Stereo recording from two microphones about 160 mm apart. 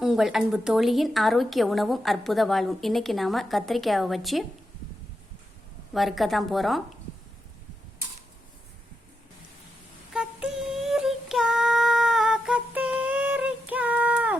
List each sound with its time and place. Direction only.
0.0 s a woman's voice: centre (ahead or behind)
5.9 s a woman's voice: centre (ahead or behind)
10.1 s female singing: 5° right (ahead or behind)